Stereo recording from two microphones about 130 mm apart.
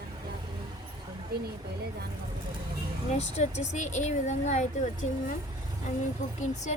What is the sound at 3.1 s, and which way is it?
Speech, 60° left (ahead or behind).